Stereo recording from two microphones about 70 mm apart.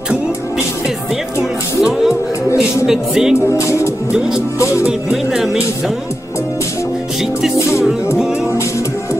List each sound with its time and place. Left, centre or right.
1.8 s music: centre
2.9 s speech: centre
3.3 s music: left
5.1 s music: centre
7.5 s music: left